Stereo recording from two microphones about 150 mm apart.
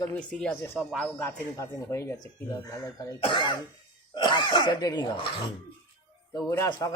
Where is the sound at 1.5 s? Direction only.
20° left (ahead or behind).